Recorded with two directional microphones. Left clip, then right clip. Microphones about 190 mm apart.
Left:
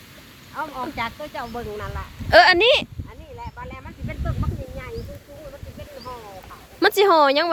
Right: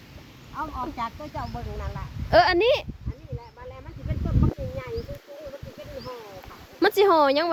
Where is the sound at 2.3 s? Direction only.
10° right (ahead or behind).